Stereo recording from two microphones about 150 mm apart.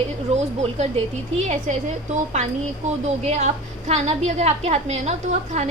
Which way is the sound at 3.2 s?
45° right (ahead or behind).